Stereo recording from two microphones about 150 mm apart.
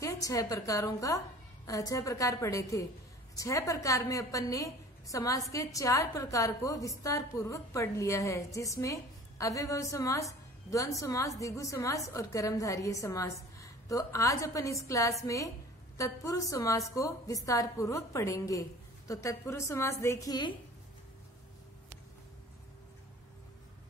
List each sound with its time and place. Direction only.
0.0 s a woman's voice: 20° left (ahead or behind)